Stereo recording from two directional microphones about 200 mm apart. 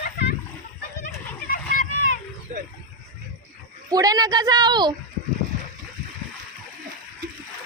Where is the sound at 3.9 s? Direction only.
20° right (ahead or behind).